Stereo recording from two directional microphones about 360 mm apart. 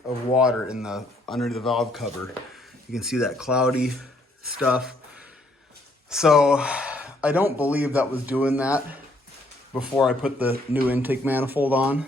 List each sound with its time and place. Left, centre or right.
0.3 s speech: centre
6.1 s speech: centre